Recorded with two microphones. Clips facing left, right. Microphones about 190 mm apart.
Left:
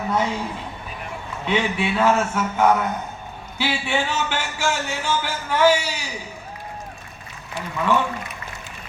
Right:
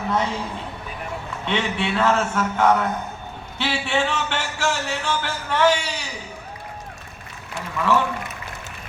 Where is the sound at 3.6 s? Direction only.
5° left (ahead or behind).